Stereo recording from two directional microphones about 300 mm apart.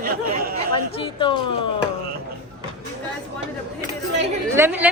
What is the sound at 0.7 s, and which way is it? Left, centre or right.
Speech, centre.